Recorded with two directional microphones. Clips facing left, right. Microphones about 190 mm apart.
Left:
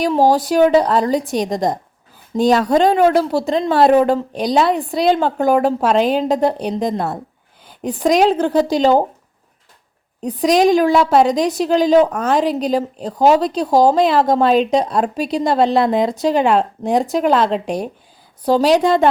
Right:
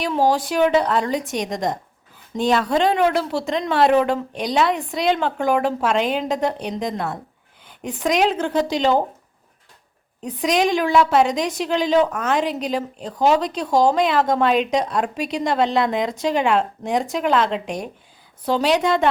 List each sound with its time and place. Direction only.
0.0 s a woman's voice: 40° left (ahead or behind)
10.2 s a woman's voice: 35° left (ahead or behind)